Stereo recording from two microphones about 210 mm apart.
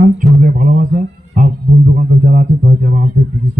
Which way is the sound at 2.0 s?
40° right (ahead or behind).